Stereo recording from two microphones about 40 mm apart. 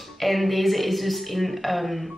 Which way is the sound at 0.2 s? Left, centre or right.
Centre.